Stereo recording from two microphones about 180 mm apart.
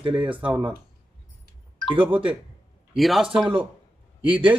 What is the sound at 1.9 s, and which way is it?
A man's voice, 10° right (ahead or behind).